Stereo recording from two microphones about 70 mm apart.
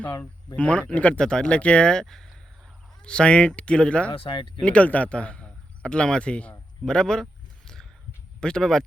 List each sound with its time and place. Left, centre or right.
0.2 s a man's voice: centre
8.4 s speech: centre